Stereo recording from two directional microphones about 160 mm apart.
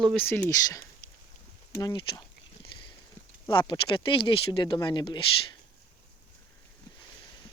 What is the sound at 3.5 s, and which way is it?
Speech, 30° left (ahead or behind).